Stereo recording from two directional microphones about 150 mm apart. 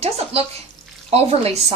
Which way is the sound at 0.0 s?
40° right (ahead or behind).